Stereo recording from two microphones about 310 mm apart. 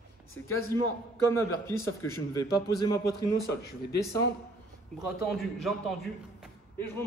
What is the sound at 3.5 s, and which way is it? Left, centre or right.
Speech, left.